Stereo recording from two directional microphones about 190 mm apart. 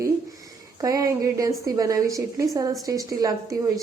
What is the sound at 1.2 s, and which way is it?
A woman's voice, 20° right (ahead or behind).